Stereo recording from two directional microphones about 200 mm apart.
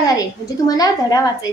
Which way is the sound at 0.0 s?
20° left (ahead or behind).